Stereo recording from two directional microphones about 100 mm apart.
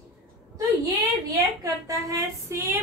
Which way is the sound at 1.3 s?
35° right (ahead or behind).